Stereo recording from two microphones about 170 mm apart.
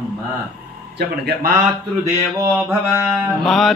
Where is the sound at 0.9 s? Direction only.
70° right (ahead or behind).